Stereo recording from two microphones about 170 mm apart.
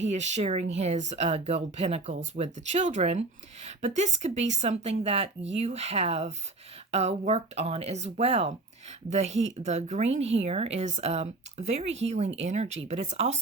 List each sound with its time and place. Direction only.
0.1 s speech: 45° right (ahead or behind)